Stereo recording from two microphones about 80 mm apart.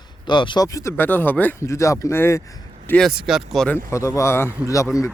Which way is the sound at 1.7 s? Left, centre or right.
Left.